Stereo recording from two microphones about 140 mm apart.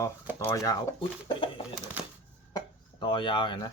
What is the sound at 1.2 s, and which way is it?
Speech, 35° left (ahead or behind).